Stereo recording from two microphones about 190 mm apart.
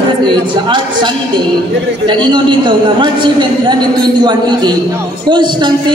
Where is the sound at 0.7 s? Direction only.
25° right (ahead or behind).